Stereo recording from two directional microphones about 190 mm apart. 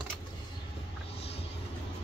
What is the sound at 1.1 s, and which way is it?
Vehicle, 30° left (ahead or behind).